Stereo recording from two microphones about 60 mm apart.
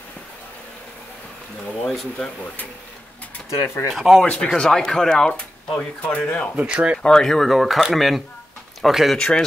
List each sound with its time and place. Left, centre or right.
1.9 s speech: centre
3.4 s speech: left
3.9 s speech: centre
4.2 s speech: centre
6.5 s speech: right
7.0 s speech: centre